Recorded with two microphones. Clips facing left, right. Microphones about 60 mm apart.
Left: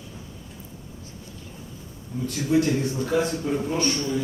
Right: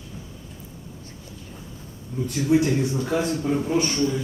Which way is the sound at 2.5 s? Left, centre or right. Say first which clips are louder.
Right 1 dB; right.